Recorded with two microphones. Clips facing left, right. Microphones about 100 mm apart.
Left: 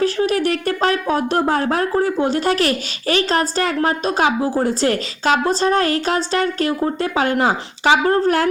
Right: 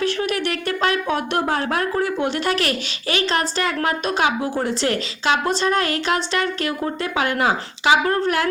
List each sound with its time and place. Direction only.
0.0 s speech: 35° left (ahead or behind)